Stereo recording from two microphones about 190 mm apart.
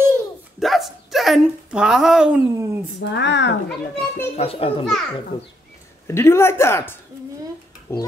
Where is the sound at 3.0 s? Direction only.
65° left (ahead or behind).